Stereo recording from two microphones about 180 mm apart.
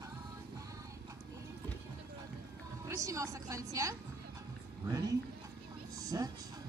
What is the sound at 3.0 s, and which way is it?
A woman's voice, 15° right (ahead or behind).